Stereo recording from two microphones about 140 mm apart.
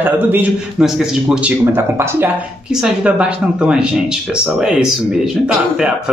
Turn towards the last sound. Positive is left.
turn(degrees=-5)  # may be behind; listen again after turning